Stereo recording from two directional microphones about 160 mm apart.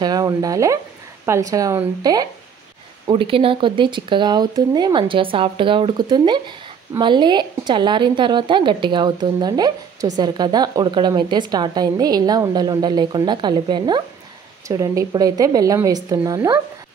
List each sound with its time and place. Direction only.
0.0 s speech: 25° right (ahead or behind)
3.1 s speech: 35° right (ahead or behind)